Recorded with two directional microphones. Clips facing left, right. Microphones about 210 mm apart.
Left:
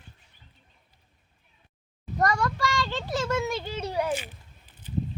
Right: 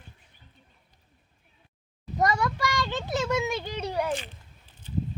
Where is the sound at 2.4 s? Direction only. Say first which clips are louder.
Left 1 dB; 20° right (ahead or behind).